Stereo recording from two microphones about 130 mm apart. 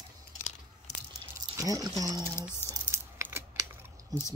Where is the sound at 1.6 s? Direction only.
25° right (ahead or behind).